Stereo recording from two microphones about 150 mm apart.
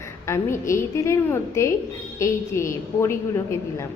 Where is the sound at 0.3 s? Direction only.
20° left (ahead or behind).